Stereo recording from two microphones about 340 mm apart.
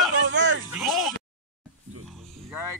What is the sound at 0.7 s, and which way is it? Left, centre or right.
Speech, centre.